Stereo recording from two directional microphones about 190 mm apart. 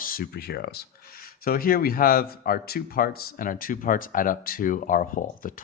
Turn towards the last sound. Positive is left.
turn(degrees=45)  # may be behind; listen again after turning